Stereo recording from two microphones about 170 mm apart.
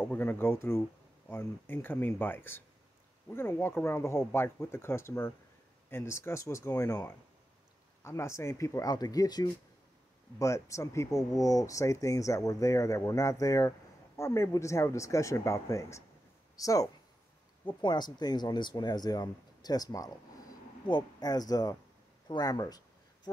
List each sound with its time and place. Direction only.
0.0 s speech: 10° left (ahead or behind)